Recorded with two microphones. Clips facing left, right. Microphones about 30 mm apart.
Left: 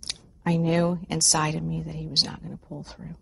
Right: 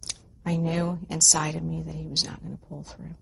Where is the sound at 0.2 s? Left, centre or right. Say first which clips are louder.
Left 3 dB; centre.